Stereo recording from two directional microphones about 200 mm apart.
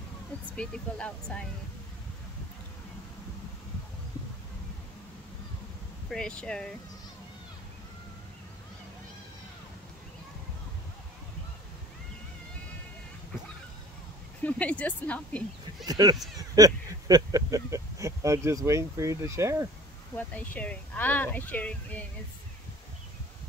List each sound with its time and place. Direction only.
0.6 s speech: 5° left (ahead or behind)
6.0 s speech: 5° left (ahead or behind)
14.4 s speech: 5° left (ahead or behind)
15.8 s speech: 20° right (ahead or behind)
20.2 s speech: 5° left (ahead or behind)